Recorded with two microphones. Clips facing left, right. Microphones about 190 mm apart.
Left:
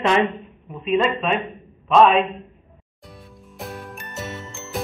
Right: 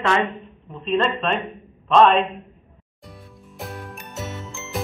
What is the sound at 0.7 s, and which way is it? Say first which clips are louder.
A man's voice: left 2 dB; 5° left (ahead or behind).